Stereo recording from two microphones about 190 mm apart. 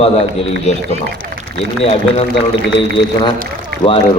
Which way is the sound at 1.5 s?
30° left (ahead or behind).